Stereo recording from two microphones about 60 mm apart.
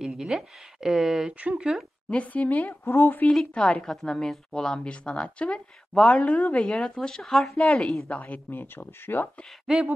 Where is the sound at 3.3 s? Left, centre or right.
Centre; by 6.7 s left.